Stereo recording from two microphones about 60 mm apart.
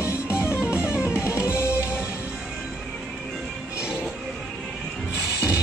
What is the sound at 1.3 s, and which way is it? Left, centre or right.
Music, left.